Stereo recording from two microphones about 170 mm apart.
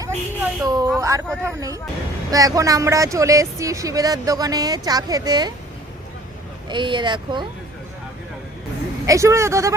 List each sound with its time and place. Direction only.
0.0 s a sound: 20° right (ahead or behind)
1.5 s speech: 20° right (ahead or behind)
6.7 s speech: 25° right (ahead or behind)
9.0 s speech: 15° right (ahead or behind)